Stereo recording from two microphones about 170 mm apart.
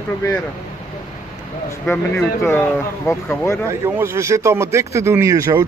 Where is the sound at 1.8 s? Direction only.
10° left (ahead or behind).